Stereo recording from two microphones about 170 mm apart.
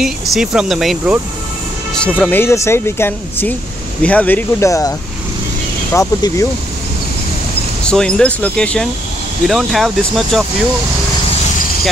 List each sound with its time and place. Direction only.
0.0 s speech: 5° right (ahead or behind)
2.1 s speech: 10° left (ahead or behind)
5.9 s speech: 20° left (ahead or behind)
7.8 s speech: 5° left (ahead or behind)